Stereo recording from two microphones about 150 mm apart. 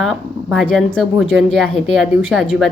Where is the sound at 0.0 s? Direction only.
Centre (ahead or behind).